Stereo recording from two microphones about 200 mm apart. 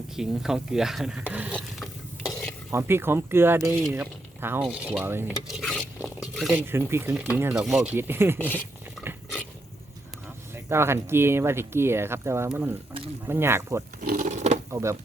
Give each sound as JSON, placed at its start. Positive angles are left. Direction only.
{"t": 0.2, "sound": "speech", "side_deg": -5}
{"t": 2.7, "sound": "speech", "side_deg": -10}
{"t": 3.9, "sound": "mechanisms", "side_deg": -10}
{"t": 5.8, "sound": "a sound", "side_deg": -5}
{"t": 6.7, "sound": "speech", "side_deg": -10}
{"t": 8.4, "sound": "a sound", "side_deg": -10}
{"t": 10.5, "sound": "speech", "side_deg": -10}
{"t": 14.0, "sound": "a sound", "side_deg": -45}
{"t": 14.7, "sound": "speech", "side_deg": -15}